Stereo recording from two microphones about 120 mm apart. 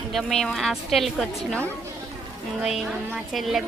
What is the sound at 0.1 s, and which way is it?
Speech, 5° left (ahead or behind).